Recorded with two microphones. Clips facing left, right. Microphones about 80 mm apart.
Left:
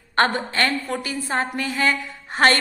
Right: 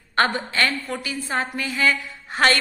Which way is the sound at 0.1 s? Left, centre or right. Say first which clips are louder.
Left 1 dB; left.